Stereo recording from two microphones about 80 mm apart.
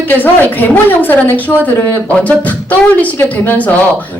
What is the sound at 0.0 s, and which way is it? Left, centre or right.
A woman's voice, left.